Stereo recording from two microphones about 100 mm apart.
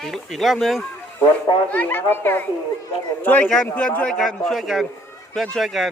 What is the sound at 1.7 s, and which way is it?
A man's voice, 20° left (ahead or behind).